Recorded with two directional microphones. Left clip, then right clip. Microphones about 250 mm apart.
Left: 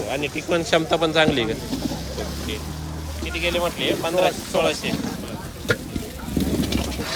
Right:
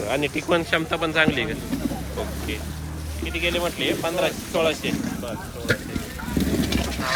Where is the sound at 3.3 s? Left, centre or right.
Centre.